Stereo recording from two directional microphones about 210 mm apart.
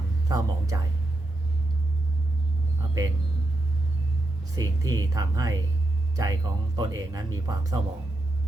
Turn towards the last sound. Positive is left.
turn(degrees=-15)  # may be behind; listen again after turning